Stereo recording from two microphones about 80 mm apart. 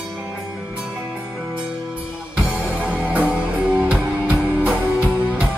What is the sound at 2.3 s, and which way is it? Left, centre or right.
Music, centre.